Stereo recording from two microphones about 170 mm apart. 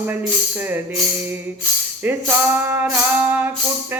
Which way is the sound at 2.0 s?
10° right (ahead or behind).